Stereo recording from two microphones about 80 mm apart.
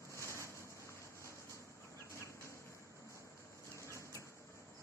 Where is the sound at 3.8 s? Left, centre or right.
Left.